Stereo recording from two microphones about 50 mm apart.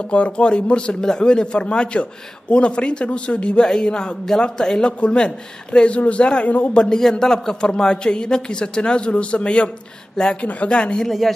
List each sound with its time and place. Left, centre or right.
0.1 s a man's voice: left
6.7 s a man's voice: centre
11.1 s speech: centre